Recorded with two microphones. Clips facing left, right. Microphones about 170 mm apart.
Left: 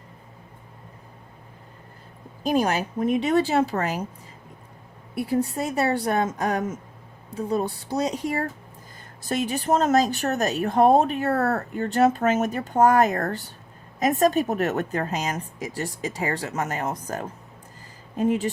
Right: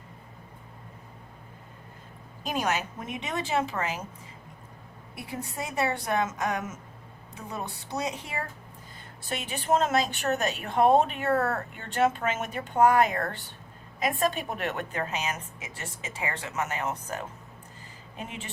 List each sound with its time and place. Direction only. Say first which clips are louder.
2.4 s a woman's voice: left 7 dB; 35° left (ahead or behind)
5.2 s a woman's voice: left 11 dB; 35° left (ahead or behind)